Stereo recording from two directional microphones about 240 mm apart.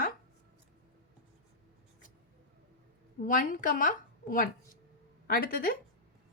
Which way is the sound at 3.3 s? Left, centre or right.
Left.